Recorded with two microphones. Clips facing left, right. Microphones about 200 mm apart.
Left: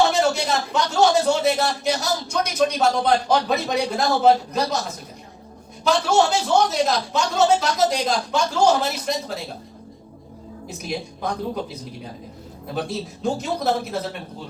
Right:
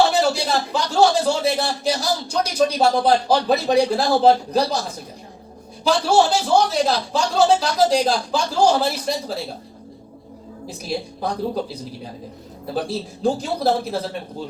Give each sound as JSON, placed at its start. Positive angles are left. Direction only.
{"t": 0.1, "sound": "speech", "side_deg": -30}
{"t": 5.8, "sound": "speech", "side_deg": -30}
{"t": 10.7, "sound": "speech", "side_deg": -35}